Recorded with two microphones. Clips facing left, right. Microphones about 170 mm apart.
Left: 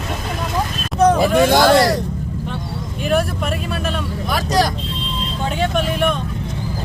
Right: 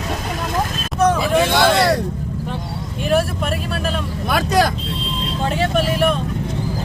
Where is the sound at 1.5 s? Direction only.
45° left (ahead or behind).